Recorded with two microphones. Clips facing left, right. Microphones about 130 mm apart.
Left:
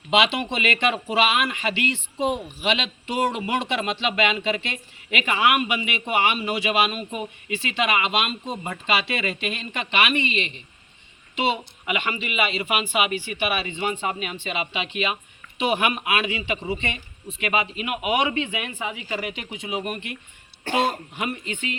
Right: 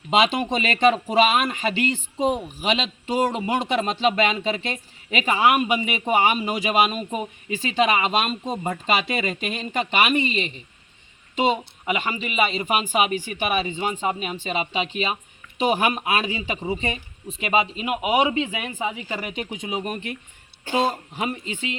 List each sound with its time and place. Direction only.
0.1 s a man's voice: 40° right (ahead or behind)
21.2 s speech: 30° right (ahead or behind)